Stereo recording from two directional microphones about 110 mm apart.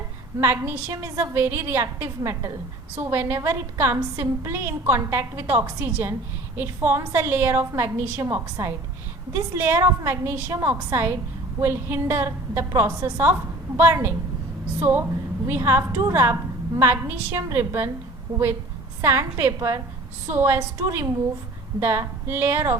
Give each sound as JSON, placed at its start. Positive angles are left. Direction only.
{"t": 0.3, "sound": "a woman's voice", "side_deg": -25}
{"t": 19.0, "sound": "a woman's voice", "side_deg": -25}